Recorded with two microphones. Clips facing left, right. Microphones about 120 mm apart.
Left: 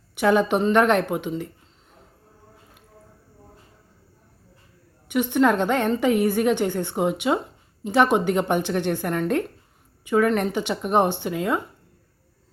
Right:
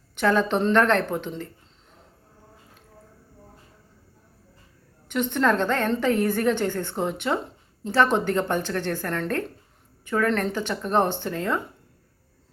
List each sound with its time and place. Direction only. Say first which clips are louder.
0.2 s speech: left 2 dB; 15° left (ahead or behind)
5.0 s speech: left 3 dB; 10° left (ahead or behind)